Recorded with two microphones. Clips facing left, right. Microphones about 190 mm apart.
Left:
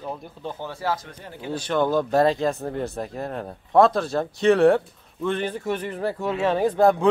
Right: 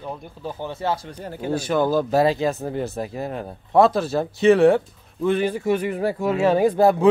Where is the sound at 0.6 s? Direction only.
20° right (ahead or behind).